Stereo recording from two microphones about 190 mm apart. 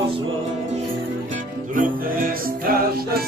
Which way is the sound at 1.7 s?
45° right (ahead or behind).